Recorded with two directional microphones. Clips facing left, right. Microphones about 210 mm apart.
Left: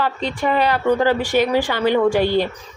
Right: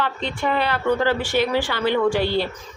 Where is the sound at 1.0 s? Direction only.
15° left (ahead or behind).